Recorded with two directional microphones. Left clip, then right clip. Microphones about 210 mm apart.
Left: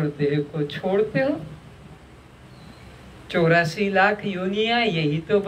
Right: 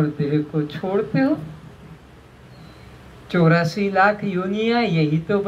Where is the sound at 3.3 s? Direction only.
50° left (ahead or behind).